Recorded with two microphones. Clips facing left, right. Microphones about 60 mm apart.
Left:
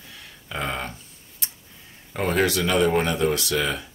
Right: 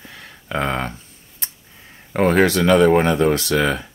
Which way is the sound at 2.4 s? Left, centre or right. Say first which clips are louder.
Right 6 dB; right.